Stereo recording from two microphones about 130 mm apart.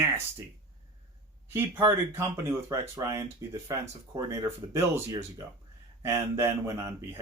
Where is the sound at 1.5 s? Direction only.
20° right (ahead or behind).